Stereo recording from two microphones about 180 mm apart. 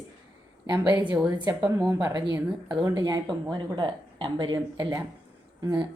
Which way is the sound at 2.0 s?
20° right (ahead or behind).